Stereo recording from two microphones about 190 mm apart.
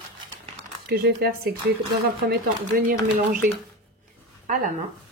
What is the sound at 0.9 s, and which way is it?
Speech, 55° right (ahead or behind).